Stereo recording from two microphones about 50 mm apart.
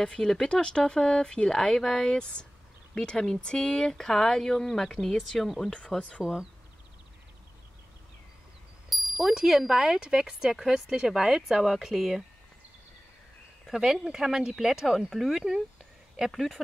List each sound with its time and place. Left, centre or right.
0.0 s speech: centre
8.8 s a sound: centre
9.4 s speech: centre
13.7 s speech: centre
15.3 s speech: centre